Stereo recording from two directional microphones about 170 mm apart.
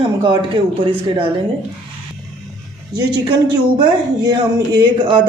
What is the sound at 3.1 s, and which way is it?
A woman's voice, 25° right (ahead or behind).